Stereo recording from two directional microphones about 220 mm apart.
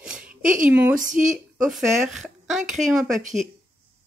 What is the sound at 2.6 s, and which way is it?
Speech, 35° right (ahead or behind).